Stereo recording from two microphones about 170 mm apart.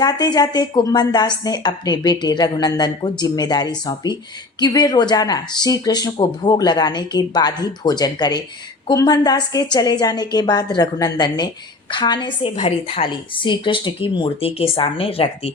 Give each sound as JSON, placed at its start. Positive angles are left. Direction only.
{"t": 0.0, "sound": "a woman's voice", "side_deg": 25}